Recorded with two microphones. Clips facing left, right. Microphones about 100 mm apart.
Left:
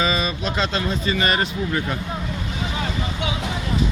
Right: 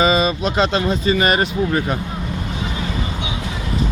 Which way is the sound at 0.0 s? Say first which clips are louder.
Right 6 dB; 20° right (ahead or behind).